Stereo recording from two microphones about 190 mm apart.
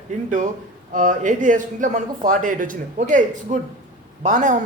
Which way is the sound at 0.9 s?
45° right (ahead or behind).